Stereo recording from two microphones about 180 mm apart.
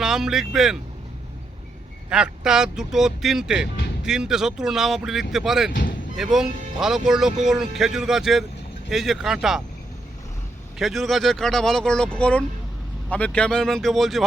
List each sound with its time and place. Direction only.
0.0 s speech: centre (ahead or behind)
2.0 s speech: 5° right (ahead or behind)
10.8 s speech: centre (ahead or behind)